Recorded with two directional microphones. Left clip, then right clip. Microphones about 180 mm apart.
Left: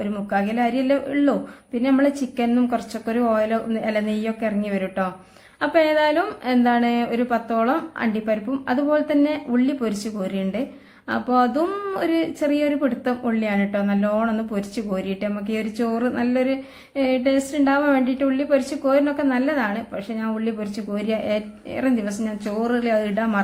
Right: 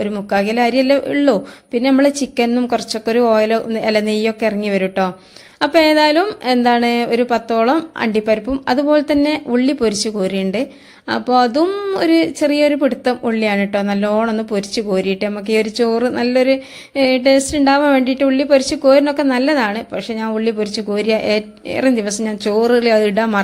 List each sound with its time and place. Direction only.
0.0 s a woman's voice: 40° right (ahead or behind)